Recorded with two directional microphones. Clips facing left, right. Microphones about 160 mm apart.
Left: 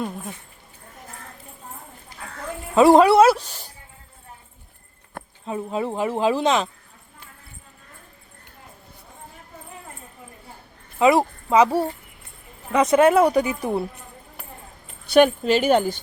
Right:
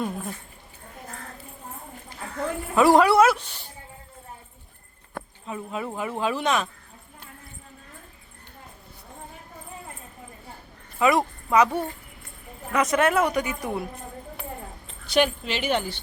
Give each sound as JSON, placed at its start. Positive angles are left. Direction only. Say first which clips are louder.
{"t": 2.7, "sound": "speech", "louder": "left 4 dB", "side_deg": 25}
{"t": 5.5, "sound": "speech", "louder": "left 6 dB", "side_deg": 30}
{"t": 11.0, "sound": "a woman's voice", "louder": "left 4 dB", "side_deg": 25}
{"t": 15.1, "sound": "speech", "louder": "left 7 dB", "side_deg": 50}